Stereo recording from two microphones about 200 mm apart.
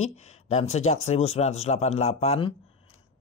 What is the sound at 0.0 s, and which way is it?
Speech, 35° left (ahead or behind).